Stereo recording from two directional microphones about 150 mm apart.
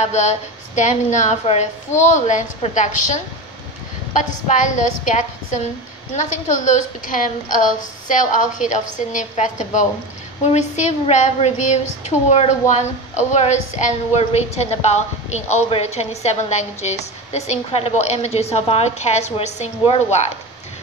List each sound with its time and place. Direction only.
0.0 s a woman's voice: 50° left (ahead or behind)
4.1 s a woman's voice: 55° left (ahead or behind)